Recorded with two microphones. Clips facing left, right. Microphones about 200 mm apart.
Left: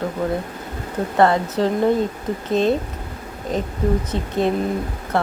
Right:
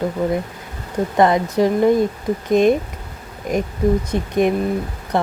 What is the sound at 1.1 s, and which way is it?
Speech, 15° right (ahead or behind).